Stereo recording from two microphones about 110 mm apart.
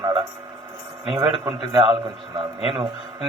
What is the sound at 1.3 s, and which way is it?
A man's voice, 55° right (ahead or behind).